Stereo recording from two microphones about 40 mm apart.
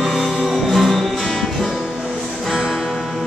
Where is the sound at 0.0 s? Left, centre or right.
Centre.